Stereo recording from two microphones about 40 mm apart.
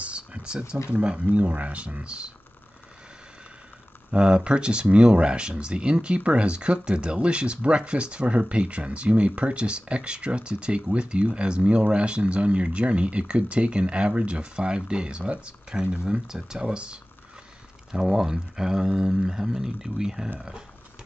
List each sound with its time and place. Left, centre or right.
0.0 s a sound: right
0.9 s speech: right
4.1 s speech: right
16.3 s speech: centre
17.9 s speech: centre